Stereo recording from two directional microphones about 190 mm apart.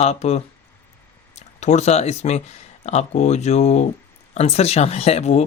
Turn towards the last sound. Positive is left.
turn(degrees=35)  # may be behind; listen again after turning